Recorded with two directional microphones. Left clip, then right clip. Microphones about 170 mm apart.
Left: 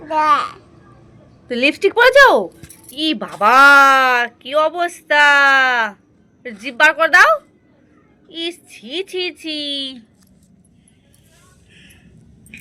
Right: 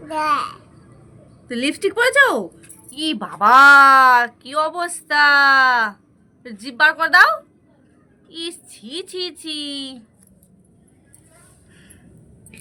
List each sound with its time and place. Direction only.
0.1 s a child's voice: 40° right (ahead or behind)
1.5 s speech: 25° right (ahead or behind)